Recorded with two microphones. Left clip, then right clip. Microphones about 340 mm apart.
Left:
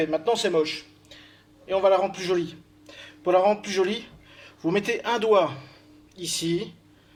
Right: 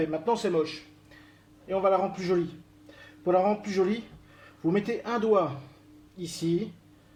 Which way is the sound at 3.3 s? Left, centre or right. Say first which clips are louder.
Left 4 dB; left.